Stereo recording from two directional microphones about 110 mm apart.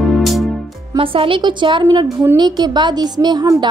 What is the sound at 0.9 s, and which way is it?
A woman's voice, 55° right (ahead or behind).